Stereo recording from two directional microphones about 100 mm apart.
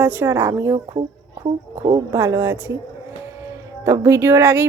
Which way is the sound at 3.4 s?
30° right (ahead or behind).